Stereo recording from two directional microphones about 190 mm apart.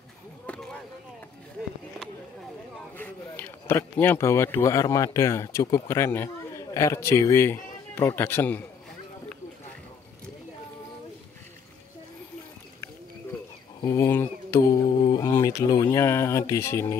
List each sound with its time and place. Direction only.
0.5 s a sound: 5° left (ahead or behind)
3.0 s speech: 10° left (ahead or behind)
13.7 s speech: 15° left (ahead or behind)